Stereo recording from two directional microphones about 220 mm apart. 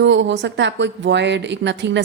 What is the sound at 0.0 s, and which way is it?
Speech, 55° right (ahead or behind).